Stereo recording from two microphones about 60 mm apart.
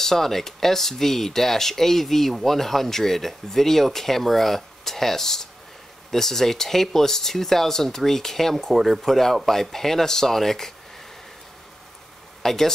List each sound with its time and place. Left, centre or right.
0.0 s speech: centre
12.4 s speech: centre